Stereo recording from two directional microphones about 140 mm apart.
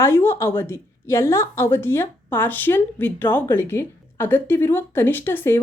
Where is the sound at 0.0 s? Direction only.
20° left (ahead or behind).